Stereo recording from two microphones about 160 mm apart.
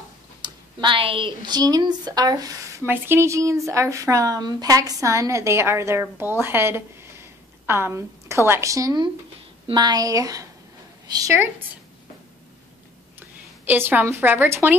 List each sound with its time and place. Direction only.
0.4 s a woman's voice: 30° right (ahead or behind)
13.7 s speech: 10° right (ahead or behind)